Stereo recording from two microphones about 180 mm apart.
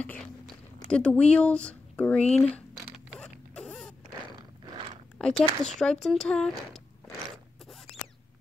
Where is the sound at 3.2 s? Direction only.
5° left (ahead or behind).